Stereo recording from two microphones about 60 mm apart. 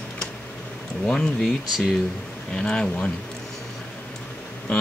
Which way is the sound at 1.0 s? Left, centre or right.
Centre.